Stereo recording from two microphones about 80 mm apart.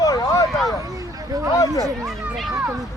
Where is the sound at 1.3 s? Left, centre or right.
Right.